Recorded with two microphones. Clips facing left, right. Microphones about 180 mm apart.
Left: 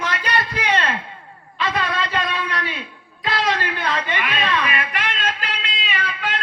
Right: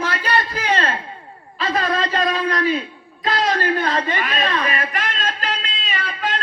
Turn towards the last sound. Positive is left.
turn(degrees=-35)  # may be behind; listen again after turning